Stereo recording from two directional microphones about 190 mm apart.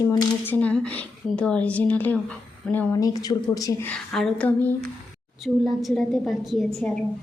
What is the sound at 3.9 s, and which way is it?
A woman's voice, centre (ahead or behind).